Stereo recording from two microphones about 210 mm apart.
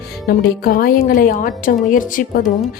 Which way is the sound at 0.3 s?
45° left (ahead or behind).